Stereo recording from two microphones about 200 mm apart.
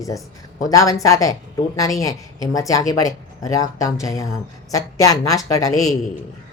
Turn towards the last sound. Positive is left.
turn(degrees=20)  # may be behind; listen again after turning